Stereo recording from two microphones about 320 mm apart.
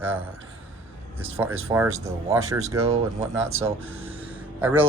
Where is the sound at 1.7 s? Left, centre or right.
Centre.